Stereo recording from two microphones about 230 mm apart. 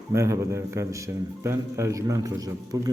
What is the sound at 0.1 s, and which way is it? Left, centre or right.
A man's voice, centre.